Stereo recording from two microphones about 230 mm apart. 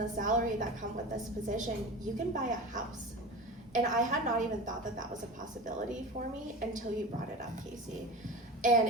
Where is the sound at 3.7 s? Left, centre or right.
Right.